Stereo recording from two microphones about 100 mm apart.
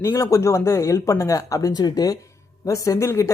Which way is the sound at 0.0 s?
30° left (ahead or behind).